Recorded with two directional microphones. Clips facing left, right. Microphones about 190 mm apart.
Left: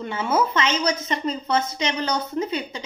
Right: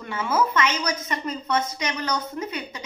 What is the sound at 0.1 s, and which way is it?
A woman's voice, 25° left (ahead or behind).